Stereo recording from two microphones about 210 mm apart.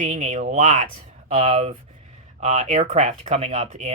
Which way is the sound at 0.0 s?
35° right (ahead or behind).